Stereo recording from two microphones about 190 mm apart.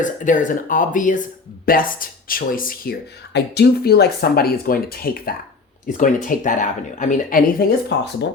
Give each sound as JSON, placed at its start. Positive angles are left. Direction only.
{"t": 0.0, "sound": "speech", "side_deg": 40}
{"t": 3.3, "sound": "speech", "side_deg": 60}
{"t": 7.9, "sound": "speech", "side_deg": 65}